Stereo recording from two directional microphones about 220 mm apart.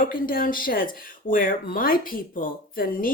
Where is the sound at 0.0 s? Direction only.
40° left (ahead or behind).